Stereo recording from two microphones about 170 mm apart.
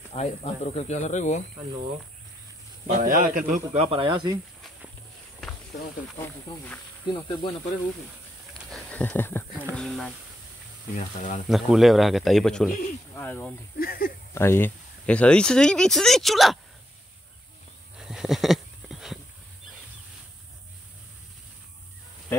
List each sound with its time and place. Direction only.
0.1 s speech: 40° left (ahead or behind)
2.9 s speech: 55° right (ahead or behind)
3.7 s speech: 30° right (ahead or behind)
7.2 s speech: 25° left (ahead or behind)
8.9 s a sound: 10° left (ahead or behind)
9.8 s speech: 5° left (ahead or behind)
11.0 s speech: 45° left (ahead or behind)
11.4 s speech: centre (ahead or behind)
13.7 s speech: 60° left (ahead or behind)
14.3 s speech: 15° left (ahead or behind)
17.9 s a sound: 5° right (ahead or behind)